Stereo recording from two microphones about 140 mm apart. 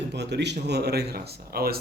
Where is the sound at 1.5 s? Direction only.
90° right.